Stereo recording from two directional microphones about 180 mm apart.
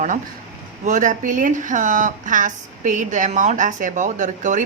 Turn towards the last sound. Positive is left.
turn(degrees=-45)  # may be behind; listen again after turning